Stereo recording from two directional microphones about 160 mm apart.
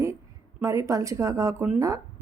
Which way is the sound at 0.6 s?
20° right (ahead or behind).